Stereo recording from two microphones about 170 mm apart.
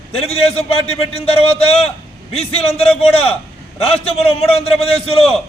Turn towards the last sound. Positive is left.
turn(degrees=35)  # may be behind; listen again after turning